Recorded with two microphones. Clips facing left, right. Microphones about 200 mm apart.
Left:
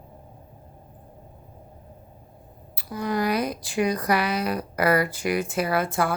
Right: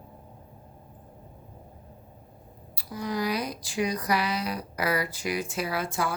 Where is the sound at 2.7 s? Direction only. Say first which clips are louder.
Left 4 dB; 55° left (ahead or behind).